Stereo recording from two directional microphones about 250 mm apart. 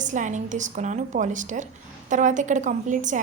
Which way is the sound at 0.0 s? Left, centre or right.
Right.